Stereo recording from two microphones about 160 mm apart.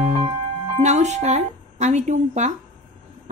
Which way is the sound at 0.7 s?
50° right (ahead or behind).